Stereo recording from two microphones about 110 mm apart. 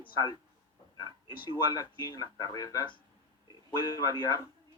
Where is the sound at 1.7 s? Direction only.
35° left (ahead or behind).